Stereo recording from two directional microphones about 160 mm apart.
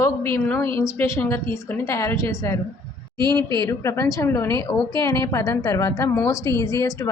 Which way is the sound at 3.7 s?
20° left (ahead or behind).